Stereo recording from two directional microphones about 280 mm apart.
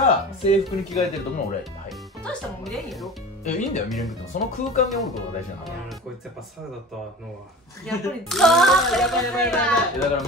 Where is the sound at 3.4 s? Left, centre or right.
Left.